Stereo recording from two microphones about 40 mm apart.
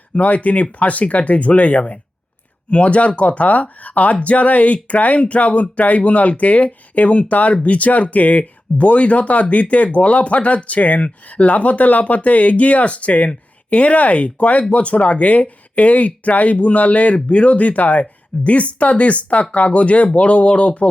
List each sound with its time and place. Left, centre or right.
0.2 s speech: left